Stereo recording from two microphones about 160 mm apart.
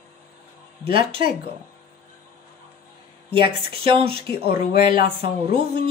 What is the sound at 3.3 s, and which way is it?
Speech, 35° right (ahead or behind).